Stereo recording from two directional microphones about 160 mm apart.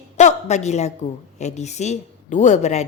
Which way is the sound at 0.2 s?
45° left (ahead or behind).